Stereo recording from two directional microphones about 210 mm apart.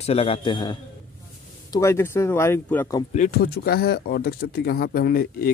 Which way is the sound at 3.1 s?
40° left (ahead or behind).